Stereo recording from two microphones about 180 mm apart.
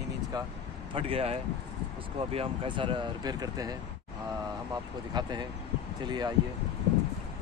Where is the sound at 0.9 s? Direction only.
30° right (ahead or behind).